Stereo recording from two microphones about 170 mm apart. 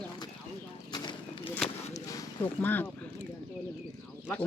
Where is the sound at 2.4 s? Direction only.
10° left (ahead or behind).